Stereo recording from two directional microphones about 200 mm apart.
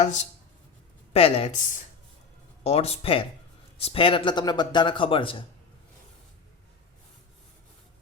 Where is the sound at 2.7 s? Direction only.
30° left (ahead or behind).